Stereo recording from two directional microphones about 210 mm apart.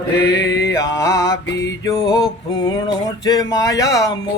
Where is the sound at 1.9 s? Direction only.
15° left (ahead or behind).